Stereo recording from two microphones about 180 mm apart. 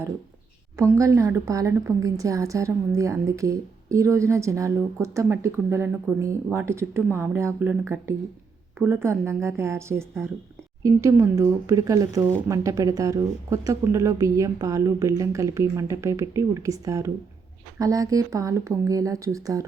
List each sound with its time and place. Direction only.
0.8 s a woman's voice: 15° right (ahead or behind)